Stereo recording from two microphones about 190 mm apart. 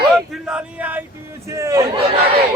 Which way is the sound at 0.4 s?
5° right (ahead or behind).